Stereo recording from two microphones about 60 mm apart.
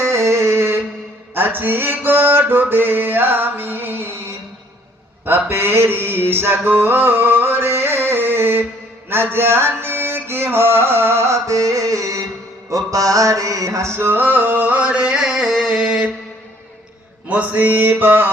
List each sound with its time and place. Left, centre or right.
0.0 s a sound: right
1.3 s music: right
5.2 s a sound: right
9.0 s music: right
11.3 s music: right
12.7 s mantra: right; by 16.0 s centre
17.2 s mantra: right